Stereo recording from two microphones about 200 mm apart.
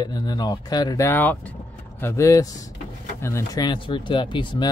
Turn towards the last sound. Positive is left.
turn(degrees=25)  # may be behind; listen again after turning